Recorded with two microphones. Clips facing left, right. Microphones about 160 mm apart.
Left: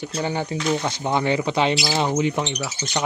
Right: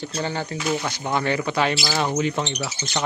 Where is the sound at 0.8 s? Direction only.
20° left (ahead or behind).